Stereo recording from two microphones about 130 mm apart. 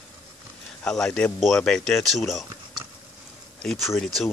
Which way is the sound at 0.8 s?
5° left (ahead or behind).